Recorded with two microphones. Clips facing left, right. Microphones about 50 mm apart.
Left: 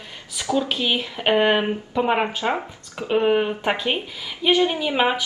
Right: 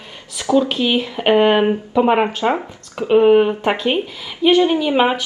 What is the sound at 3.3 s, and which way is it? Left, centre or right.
Speech, centre.